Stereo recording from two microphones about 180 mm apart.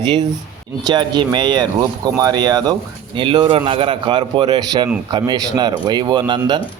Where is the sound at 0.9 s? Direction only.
25° right (ahead or behind).